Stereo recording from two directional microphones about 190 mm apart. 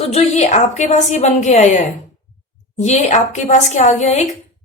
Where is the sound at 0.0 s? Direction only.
35° left (ahead or behind).